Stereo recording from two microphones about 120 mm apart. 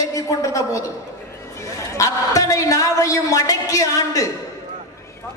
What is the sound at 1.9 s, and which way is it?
A man's voice, 30° left (ahead or behind).